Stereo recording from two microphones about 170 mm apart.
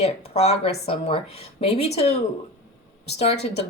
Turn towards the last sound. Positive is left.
turn(degrees=40)  # may be behind; listen again after turning